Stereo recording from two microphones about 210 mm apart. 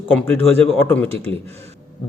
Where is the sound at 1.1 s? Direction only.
30° right (ahead or behind).